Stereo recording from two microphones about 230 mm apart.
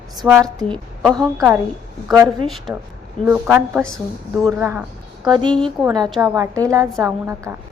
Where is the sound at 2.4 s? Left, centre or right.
Centre.